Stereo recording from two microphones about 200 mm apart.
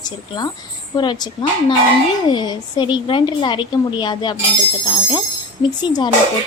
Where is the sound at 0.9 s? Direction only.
20° left (ahead or behind).